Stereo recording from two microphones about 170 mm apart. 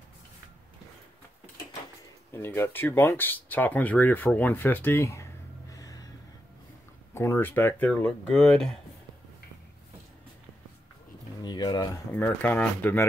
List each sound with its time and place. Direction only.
2.3 s speech: 15° left (ahead or behind)
7.2 s speech: 15° left (ahead or behind)
11.4 s a sound: 25° left (ahead or behind)
12.1 s speech: 10° left (ahead or behind)